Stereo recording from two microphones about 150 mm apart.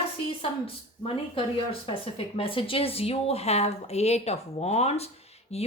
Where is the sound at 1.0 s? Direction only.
40° left (ahead or behind).